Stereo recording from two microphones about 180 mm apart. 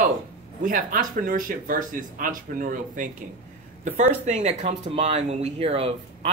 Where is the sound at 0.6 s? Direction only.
50° right (ahead or behind).